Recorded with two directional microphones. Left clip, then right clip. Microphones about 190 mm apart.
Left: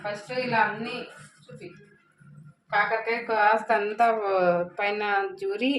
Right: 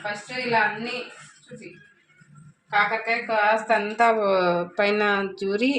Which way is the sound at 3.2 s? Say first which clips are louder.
Even; 20° right (ahead or behind).